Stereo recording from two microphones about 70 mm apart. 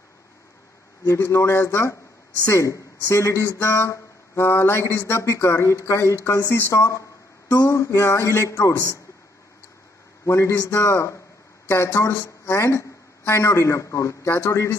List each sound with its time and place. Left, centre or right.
1.0 s speech: left
7.4 s speech: left
10.2 s a man's voice: left